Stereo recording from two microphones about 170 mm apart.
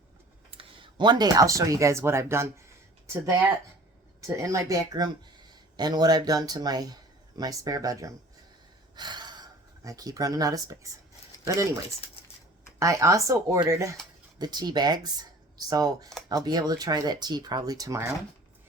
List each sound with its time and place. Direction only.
0.5 s speech: 30° right (ahead or behind)
4.3 s speech: 20° right (ahead or behind)
9.0 s gasp: 25° right (ahead or behind)
11.4 s speech: 20° right (ahead or behind)
12.8 s speech: 20° right (ahead or behind)